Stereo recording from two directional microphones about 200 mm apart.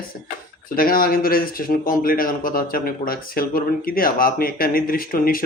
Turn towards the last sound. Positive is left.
turn(degrees=45)  # may be behind; listen again after turning